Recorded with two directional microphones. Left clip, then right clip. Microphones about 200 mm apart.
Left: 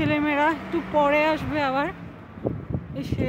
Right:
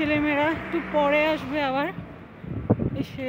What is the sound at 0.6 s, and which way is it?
Speech, 60° left (ahead or behind).